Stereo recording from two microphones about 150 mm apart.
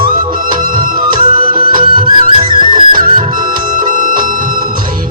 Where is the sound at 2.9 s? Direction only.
70° right (ahead or behind).